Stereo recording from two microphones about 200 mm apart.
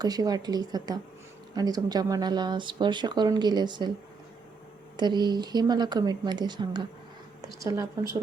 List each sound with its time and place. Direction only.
0.0 s speech: 20° right (ahead or behind)
4.9 s speech: 20° right (ahead or behind)